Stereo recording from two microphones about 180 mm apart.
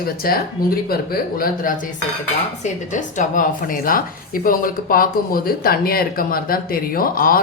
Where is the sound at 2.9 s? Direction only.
45° left (ahead or behind).